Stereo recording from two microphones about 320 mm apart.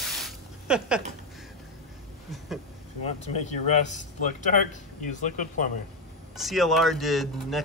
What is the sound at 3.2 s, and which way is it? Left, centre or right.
Speech, left.